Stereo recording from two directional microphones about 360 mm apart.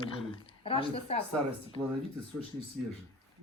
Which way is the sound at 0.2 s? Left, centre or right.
Centre.